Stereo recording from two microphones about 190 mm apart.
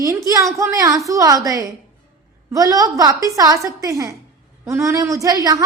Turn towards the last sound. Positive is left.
turn(degrees=-20)  # may be behind; listen again after turning